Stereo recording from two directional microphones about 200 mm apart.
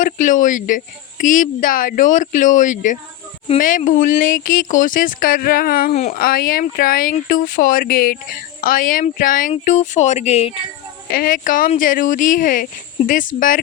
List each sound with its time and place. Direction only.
0.0 s speech: 40° left (ahead or behind)
5.9 s speech: 35° left (ahead or behind)
6.1 s speech: 45° left (ahead or behind); by 10.6 s 30° left (ahead or behind)
11.1 s speech: 45° left (ahead or behind)